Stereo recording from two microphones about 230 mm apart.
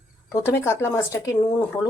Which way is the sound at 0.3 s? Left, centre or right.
Centre.